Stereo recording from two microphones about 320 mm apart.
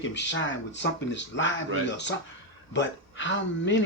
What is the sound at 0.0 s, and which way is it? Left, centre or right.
Speech, left.